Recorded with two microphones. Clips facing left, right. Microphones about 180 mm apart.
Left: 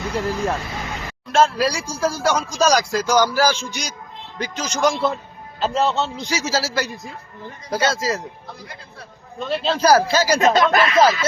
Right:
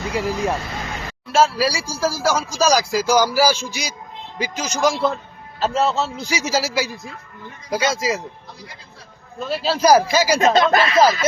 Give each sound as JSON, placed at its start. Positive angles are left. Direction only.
{"t": 0.1, "sound": "speech", "side_deg": -10}
{"t": 9.4, "sound": "speech", "side_deg": -5}
{"t": 10.5, "sound": "speech", "side_deg": -25}